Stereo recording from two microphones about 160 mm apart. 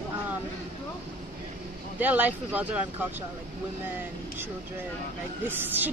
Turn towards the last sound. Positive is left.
turn(degrees=-10)  # may be behind; listen again after turning